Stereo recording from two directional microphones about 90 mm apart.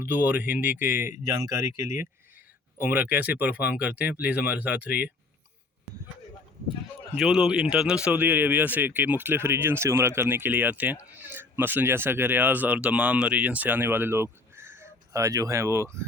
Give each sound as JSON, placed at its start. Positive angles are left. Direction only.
{"t": 0.0, "sound": "a man's voice", "side_deg": -20}
{"t": 2.8, "sound": "speech", "side_deg": -20}
{"t": 7.2, "sound": "a man's voice", "side_deg": -5}
{"t": 15.2, "sound": "speech", "side_deg": -35}